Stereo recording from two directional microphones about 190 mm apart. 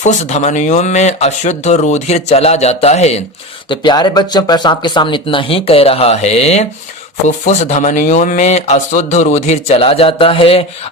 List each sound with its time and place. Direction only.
0.0 s a man's voice: 40° left (ahead or behind)
3.7 s a man's voice: 20° left (ahead or behind)